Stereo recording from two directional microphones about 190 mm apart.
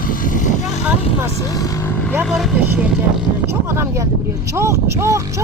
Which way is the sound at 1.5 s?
15° left (ahead or behind).